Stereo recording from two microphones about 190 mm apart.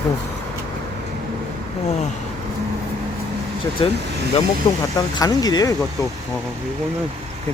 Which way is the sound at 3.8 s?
30° left (ahead or behind).